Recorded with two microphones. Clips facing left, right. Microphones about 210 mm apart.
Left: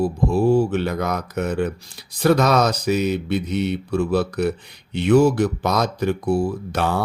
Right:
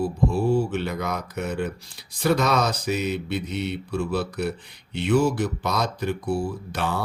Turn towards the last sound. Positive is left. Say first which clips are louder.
# left 5 dB
turn(degrees=45)  # may be behind; listen again after turning